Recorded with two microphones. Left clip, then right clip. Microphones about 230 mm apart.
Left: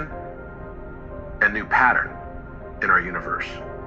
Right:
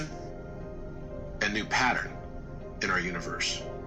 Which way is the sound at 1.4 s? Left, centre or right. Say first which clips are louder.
Left 10 dB; right.